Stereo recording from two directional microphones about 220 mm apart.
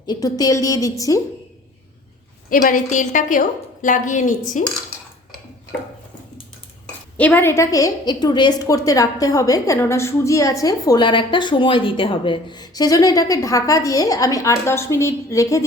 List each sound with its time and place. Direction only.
0.0 s a woman's voice: 15° left (ahead or behind)
2.5 s a woman's voice: 40° left (ahead or behind)
7.2 s a woman's voice: 10° left (ahead or behind)